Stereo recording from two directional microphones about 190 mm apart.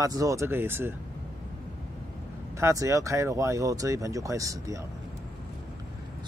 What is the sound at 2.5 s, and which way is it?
Speech, 15° right (ahead or behind).